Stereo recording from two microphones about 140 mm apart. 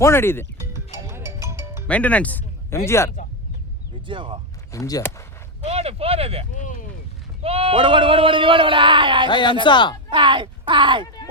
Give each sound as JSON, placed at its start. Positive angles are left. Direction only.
{"t": 0.0, "sound": "speech", "side_deg": 15}
{"t": 1.0, "sound": "music", "side_deg": -20}
{"t": 1.9, "sound": "speech", "side_deg": 10}
{"t": 4.0, "sound": "speech", "side_deg": -35}
{"t": 4.7, "sound": "speech", "side_deg": 25}
{"t": 5.6, "sound": "speech", "side_deg": -45}
{"t": 6.6, "sound": "speech", "side_deg": 65}
{"t": 7.4, "sound": "speech", "side_deg": -45}
{"t": 9.3, "sound": "speech", "side_deg": 35}
{"t": 10.1, "sound": "speech", "side_deg": -35}